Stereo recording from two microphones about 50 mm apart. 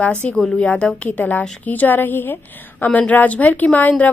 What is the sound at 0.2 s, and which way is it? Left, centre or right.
Speech, centre.